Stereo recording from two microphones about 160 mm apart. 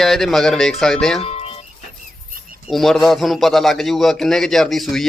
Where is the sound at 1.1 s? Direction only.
40° left (ahead or behind).